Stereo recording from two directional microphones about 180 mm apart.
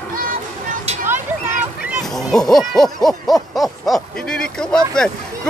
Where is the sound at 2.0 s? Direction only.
Centre (ahead or behind).